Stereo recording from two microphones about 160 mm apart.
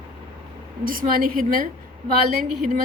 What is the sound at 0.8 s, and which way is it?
Speech, 60° right (ahead or behind).